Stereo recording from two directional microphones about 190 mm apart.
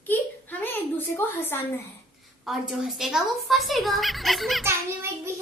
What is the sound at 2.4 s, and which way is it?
A woman's voice, centre (ahead or behind).